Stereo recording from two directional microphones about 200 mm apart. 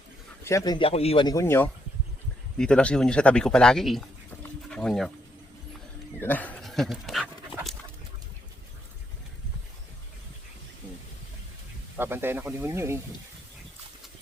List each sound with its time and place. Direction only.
0.4 s speech: 15° left (ahead or behind); by 5.1 s centre (ahead or behind)
6.1 s speech: 10° left (ahead or behind)
11.9 s speech: 10° right (ahead or behind)